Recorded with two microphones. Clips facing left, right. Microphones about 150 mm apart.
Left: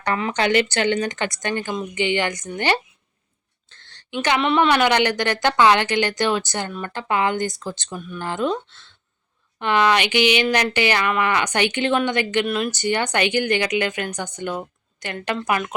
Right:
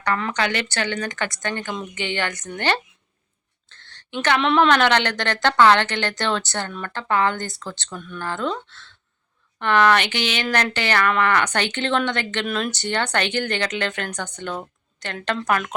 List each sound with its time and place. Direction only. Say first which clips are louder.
0.0 s speech: left 1 dB; 20° left (ahead or behind)
3.8 s a sound: even; 15° left (ahead or behind)
4.4 s speech: right 1 dB; 5° left (ahead or behind)